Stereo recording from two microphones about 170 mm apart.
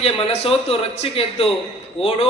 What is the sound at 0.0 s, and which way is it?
A man's voice, 40° left (ahead or behind).